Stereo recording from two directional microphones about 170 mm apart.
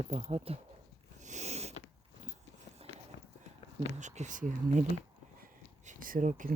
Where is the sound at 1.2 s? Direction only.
45° right (ahead or behind).